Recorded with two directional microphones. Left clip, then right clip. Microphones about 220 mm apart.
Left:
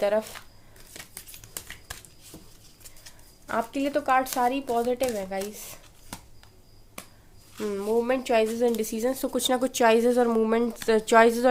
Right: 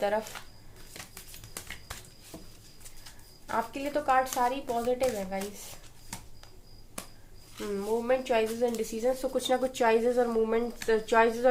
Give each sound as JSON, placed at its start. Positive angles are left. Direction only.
{"t": 0.0, "sound": "a woman's voice", "side_deg": 50}
{"t": 3.4, "sound": "a woman's voice", "side_deg": 50}
{"t": 7.6, "sound": "a woman's voice", "side_deg": 50}